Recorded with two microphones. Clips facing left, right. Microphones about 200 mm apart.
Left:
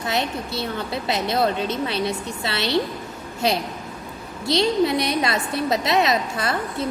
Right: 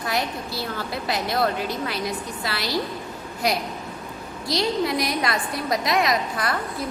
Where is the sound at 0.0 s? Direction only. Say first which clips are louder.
Left 2 dB; 25° left (ahead or behind).